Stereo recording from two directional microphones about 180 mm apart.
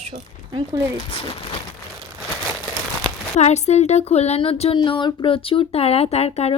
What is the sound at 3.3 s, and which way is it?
Speech, 40° left (ahead or behind).